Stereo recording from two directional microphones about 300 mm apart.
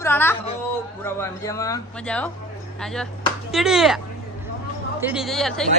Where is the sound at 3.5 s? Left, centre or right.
Centre.